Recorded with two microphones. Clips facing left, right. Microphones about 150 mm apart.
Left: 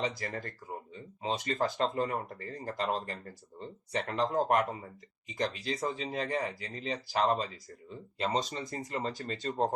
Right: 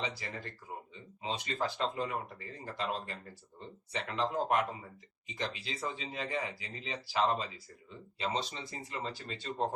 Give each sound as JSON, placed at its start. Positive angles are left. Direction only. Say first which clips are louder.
{"t": 0.0, "sound": "speech", "louder": "left 5 dB", "side_deg": 45}